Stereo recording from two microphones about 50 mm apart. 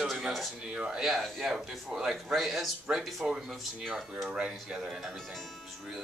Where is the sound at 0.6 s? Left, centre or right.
Centre.